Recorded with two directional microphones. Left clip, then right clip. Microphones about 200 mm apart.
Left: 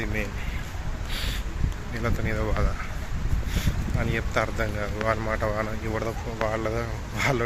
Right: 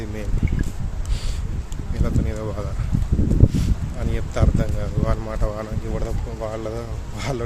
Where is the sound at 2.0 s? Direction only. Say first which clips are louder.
Even; 10° right (ahead or behind).